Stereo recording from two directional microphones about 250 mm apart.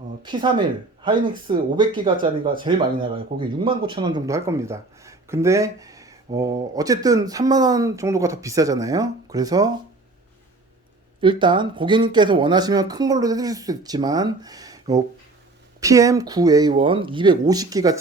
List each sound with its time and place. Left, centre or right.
0.2 s speech: centre
11.2 s speech: centre